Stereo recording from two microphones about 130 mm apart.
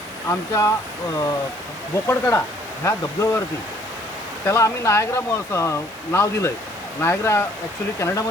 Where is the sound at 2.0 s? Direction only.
20° left (ahead or behind).